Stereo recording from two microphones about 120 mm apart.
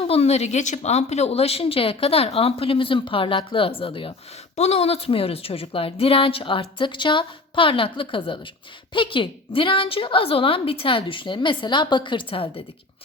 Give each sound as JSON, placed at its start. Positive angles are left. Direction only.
{"t": 0.0, "sound": "a woman's voice", "side_deg": 55}
{"t": 4.5, "sound": "a woman's voice", "side_deg": 65}